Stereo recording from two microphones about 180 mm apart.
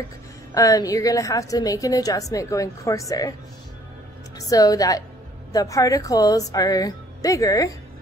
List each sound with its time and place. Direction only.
0.6 s a woman's voice: 20° left (ahead or behind)
4.4 s a woman's voice: 20° left (ahead or behind)